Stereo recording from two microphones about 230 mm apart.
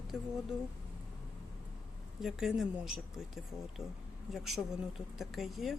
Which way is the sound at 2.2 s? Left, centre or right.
Centre.